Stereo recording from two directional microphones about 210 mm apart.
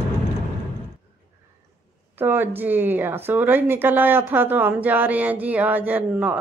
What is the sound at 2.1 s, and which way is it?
Speech, 10° right (ahead or behind).